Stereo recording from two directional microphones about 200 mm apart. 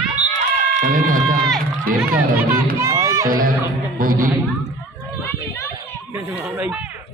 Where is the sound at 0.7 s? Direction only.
45° right (ahead or behind).